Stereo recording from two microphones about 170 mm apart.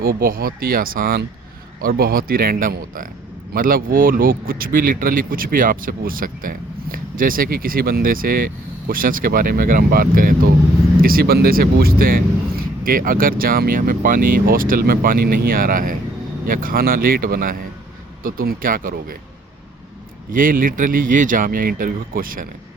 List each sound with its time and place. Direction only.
0.0 s speech: 60° right (ahead or behind)
20.3 s speech: 55° right (ahead or behind)